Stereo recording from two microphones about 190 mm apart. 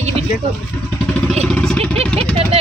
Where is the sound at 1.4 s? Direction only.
5° left (ahead or behind).